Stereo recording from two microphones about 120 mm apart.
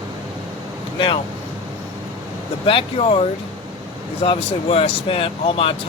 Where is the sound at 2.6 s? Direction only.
50° left (ahead or behind).